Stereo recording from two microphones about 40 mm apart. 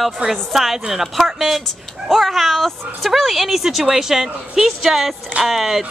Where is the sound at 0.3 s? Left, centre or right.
Centre.